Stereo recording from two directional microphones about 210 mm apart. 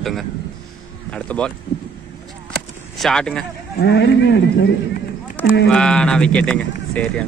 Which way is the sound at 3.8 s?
55° left (ahead or behind).